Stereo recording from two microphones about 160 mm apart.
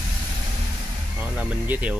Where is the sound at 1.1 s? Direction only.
10° right (ahead or behind).